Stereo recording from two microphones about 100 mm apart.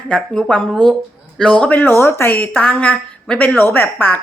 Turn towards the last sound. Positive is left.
turn(degrees=20)  # may be behind; listen again after turning